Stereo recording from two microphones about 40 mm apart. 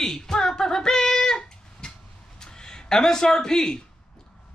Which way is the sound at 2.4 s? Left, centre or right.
Centre.